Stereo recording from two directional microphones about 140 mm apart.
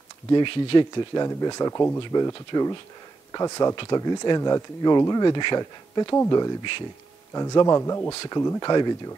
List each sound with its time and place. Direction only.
0.3 s speech: 35° left (ahead or behind); by 2.0 s 20° left (ahead or behind)
2.0 s speech: 35° left (ahead or behind)